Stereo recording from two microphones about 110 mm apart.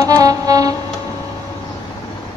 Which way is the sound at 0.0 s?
35° right (ahead or behind).